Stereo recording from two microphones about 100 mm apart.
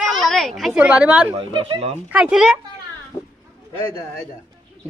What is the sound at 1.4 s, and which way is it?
Speech, 60° right (ahead or behind).